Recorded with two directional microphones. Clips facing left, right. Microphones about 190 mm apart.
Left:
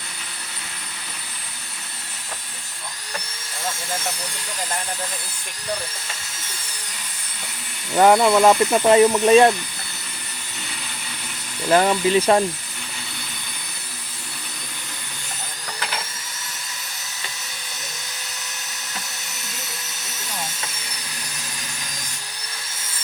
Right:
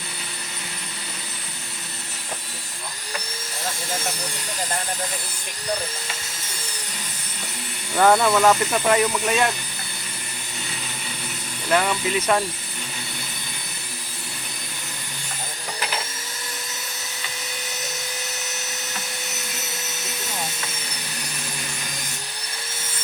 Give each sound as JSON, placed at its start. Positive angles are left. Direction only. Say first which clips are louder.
{"t": 7.9, "sound": "speech", "louder": "left 3 dB", "side_deg": 15}
{"t": 8.7, "sound": "speech", "louder": "left 6 dB", "side_deg": 25}
{"t": 11.7, "sound": "speech", "louder": "left 5 dB", "side_deg": 30}